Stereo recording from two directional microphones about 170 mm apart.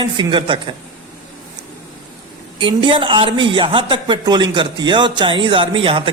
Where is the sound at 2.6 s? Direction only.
30° right (ahead or behind).